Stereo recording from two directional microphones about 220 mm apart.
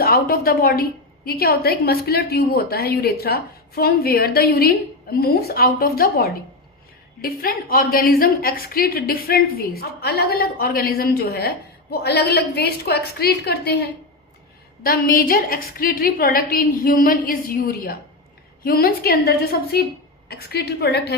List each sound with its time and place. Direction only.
0.0 s a woman's voice: 45° left (ahead or behind)